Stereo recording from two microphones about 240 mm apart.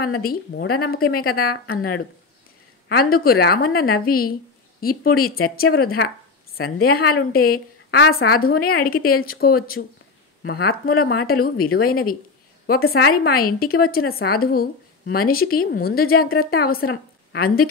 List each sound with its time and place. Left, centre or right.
0.2 s a woman's voice: left
2.9 s a woman's voice: left